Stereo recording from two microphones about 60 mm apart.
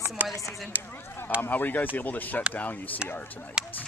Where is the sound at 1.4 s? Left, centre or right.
Left.